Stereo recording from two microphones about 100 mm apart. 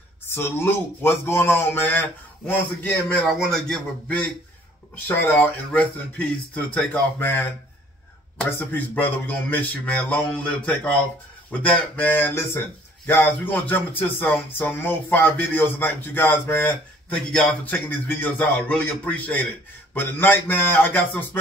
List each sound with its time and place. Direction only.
0.3 s speech: 25° left (ahead or behind)
5.0 s speech: 20° left (ahead or behind)